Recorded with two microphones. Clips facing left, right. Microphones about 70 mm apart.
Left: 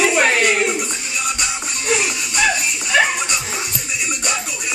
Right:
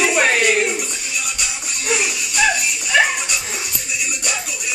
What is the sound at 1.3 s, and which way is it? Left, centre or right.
Music, centre.